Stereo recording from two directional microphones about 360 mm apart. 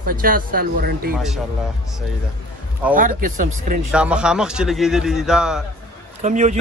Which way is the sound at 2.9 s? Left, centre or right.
Right.